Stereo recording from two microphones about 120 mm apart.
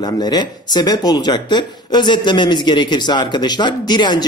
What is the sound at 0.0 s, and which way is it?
Speech, 35° left (ahead or behind).